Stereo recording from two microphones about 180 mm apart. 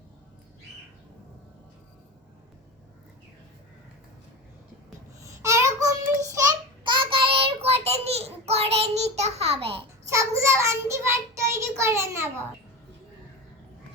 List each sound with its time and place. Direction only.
5.2 s child singing: 15° right (ahead or behind); by 9.8 s 35° right (ahead or behind)
10.1 s child singing: 15° right (ahead or behind)